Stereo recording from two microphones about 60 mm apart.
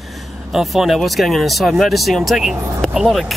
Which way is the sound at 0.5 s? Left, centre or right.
Centre.